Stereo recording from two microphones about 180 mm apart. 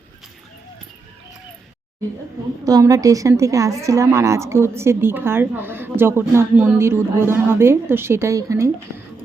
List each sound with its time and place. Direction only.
2.6 s a woman's voice: 20° right (ahead or behind)